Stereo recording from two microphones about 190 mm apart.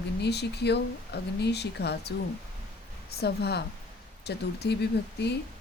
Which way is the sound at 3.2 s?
60° left (ahead or behind).